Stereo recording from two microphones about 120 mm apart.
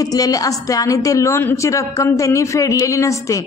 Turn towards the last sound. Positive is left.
turn(degrees=25)  # may be behind; listen again after turning